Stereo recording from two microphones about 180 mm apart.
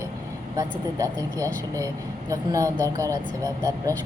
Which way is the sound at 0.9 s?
20° right (ahead or behind).